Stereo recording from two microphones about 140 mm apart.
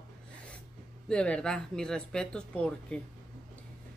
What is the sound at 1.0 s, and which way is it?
Speech, 10° left (ahead or behind).